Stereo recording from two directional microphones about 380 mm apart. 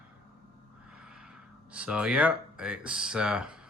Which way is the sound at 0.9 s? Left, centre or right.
Centre.